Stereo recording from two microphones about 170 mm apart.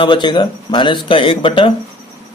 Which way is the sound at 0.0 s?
25° left (ahead or behind).